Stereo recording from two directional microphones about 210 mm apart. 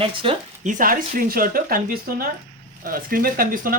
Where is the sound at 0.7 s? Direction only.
40° right (ahead or behind).